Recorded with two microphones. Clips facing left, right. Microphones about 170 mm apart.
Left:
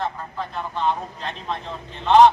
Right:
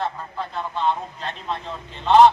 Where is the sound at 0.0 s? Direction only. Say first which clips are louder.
Even; 15° left (ahead or behind).